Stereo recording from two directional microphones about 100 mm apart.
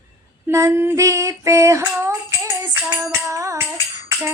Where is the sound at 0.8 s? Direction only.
25° right (ahead or behind).